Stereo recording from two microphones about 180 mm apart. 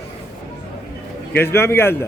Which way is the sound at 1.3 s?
10° left (ahead or behind).